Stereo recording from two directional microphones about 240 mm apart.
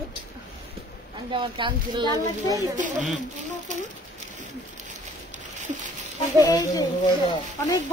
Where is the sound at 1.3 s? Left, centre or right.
Right.